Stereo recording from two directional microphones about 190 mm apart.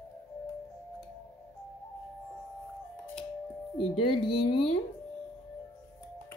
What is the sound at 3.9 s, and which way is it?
Speech, 30° left (ahead or behind).